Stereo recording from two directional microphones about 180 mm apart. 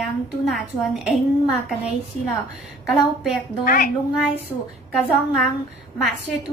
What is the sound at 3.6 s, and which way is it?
Speech, 55° left (ahead or behind).